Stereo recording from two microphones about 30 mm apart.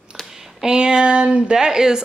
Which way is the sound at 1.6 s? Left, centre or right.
Right.